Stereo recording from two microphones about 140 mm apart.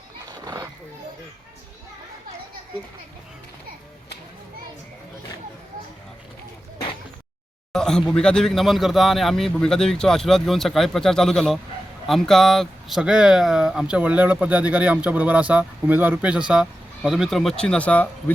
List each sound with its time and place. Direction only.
0.3 s horse: 25° right (ahead or behind)
7.7 s speech: 5° left (ahead or behind)